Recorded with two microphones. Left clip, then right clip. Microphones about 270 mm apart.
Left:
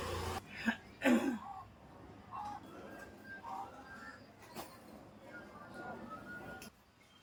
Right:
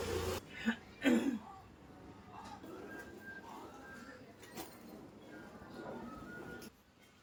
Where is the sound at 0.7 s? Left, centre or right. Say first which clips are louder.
Left 1 dB; centre.